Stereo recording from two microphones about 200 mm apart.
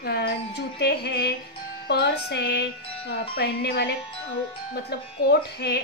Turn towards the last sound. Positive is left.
turn(degrees=55)  # may be behind; listen again after turning